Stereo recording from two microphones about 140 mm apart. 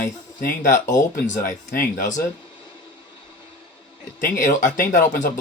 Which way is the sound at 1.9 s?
90° left.